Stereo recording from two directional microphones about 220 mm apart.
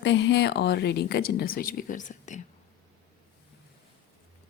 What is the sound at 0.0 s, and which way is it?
Speech, 55° left (ahead or behind).